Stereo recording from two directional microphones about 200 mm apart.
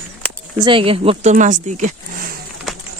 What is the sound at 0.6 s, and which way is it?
Speech, 25° right (ahead or behind).